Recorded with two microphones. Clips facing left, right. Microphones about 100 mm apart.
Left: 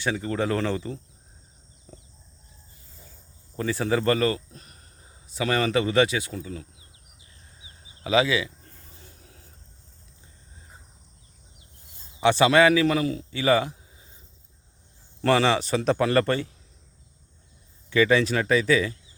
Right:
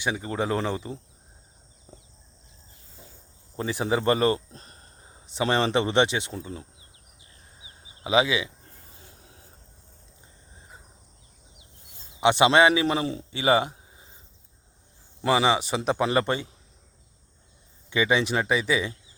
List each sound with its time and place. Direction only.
0.0 s speech: 15° right (ahead or behind)
1.9 s chicken: 20° right (ahead or behind)
3.5 s speech: 20° right (ahead or behind)
7.6 s a sound: 20° right (ahead or behind)
12.2 s a man's voice: 20° right (ahead or behind)
15.2 s speech: 15° right (ahead or behind)
17.9 s speech: 20° right (ahead or behind)